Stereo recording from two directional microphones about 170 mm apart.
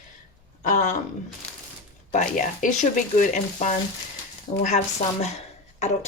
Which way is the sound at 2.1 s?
50° left (ahead or behind).